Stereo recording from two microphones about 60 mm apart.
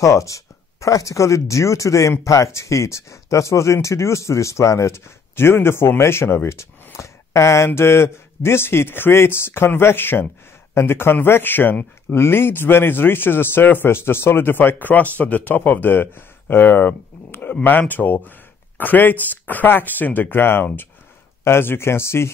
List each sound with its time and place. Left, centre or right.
0.0 s a man's voice: left
12.1 s a man's voice: left